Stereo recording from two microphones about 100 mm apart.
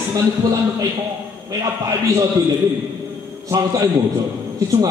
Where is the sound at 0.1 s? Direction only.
35° right (ahead or behind).